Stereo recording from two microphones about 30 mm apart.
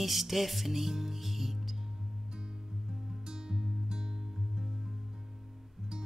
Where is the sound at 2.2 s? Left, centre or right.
Right.